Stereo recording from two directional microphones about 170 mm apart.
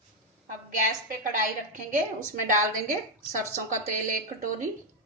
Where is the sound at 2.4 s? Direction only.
50° right (ahead or behind).